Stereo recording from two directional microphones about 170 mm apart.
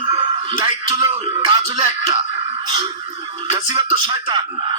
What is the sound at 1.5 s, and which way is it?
Music, 35° right (ahead or behind).